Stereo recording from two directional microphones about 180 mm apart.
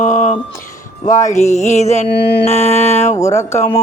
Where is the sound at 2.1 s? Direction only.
65° left (ahead or behind).